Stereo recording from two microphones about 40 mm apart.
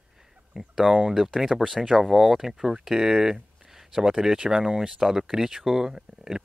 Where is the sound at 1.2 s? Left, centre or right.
Centre.